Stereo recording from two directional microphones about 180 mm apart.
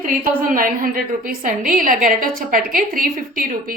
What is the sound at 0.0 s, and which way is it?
A woman's voice, 50° right (ahead or behind).